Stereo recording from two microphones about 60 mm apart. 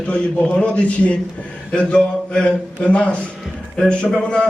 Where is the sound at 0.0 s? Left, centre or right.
Centre.